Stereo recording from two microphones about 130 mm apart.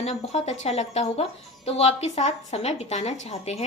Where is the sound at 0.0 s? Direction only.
55° left (ahead or behind).